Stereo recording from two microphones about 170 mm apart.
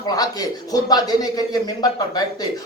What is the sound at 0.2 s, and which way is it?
Speech, 20° left (ahead or behind).